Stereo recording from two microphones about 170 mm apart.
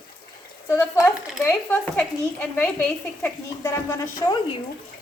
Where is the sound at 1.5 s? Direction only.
10° left (ahead or behind).